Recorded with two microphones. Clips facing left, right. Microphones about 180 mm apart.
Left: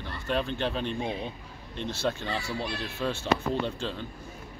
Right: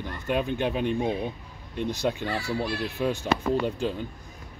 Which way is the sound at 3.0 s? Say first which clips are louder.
Right 1 dB; 15° right (ahead or behind).